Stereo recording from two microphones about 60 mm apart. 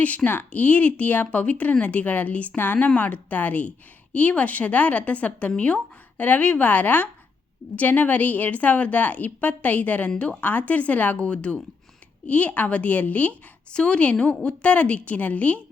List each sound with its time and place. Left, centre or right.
0.3 s a woman's voice: left